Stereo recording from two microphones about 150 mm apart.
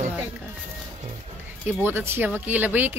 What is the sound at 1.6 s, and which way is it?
Speech, 15° right (ahead or behind).